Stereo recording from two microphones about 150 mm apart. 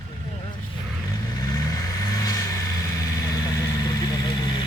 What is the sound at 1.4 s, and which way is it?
Vehicle, 25° left (ahead or behind).